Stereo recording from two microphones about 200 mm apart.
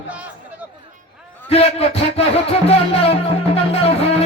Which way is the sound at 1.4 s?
30° left (ahead or behind).